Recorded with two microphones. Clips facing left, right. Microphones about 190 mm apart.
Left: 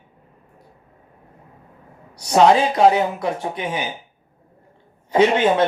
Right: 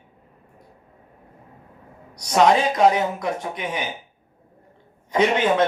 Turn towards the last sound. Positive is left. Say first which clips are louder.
# left 3 dB
turn(degrees=30)  # may be behind; listen again after turning